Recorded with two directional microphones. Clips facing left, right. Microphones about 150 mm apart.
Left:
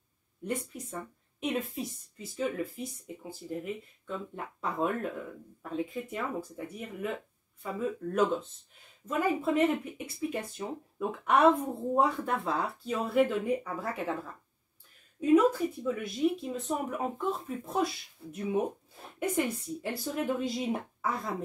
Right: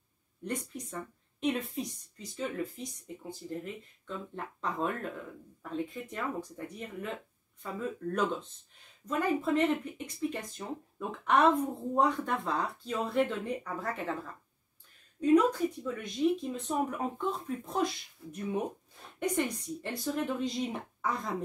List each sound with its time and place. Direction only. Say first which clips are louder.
0.5 s speech: left 2 dB; 5° left (ahead or behind)
15.1 s speech: left 1 dB; 10° left (ahead or behind)
18.2 s speech: left 1 dB; 30° left (ahead or behind)
19.1 s speech: left 1 dB; 5° left (ahead or behind)